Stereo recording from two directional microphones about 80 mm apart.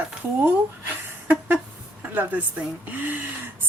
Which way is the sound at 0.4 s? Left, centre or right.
Right.